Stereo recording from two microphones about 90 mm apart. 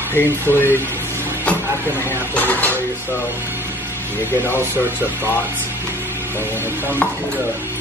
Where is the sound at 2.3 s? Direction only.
20° left (ahead or behind).